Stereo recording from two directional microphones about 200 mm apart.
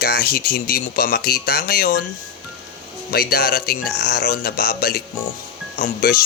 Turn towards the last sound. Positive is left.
turn(degrees=45)  # may be behind; listen again after turning